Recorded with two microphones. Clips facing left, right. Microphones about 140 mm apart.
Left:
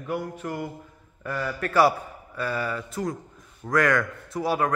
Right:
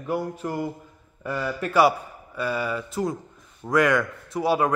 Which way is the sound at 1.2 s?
20° right (ahead or behind).